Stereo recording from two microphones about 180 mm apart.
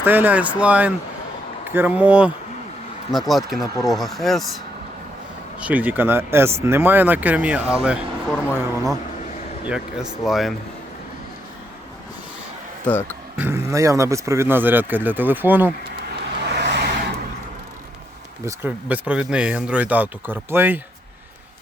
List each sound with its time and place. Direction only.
0.0 s speech: 10° right (ahead or behind)
5.5 s speech: 10° right (ahead or behind)
8.5 s speech: 20° right (ahead or behind)
9.6 s speech: 5° right (ahead or behind)
12.8 s speech: 10° left (ahead or behind)
13.3 s speech: 10° right (ahead or behind)
16.4 s vehicle: 70° right (ahead or behind)
18.4 s speech: 10° right (ahead or behind)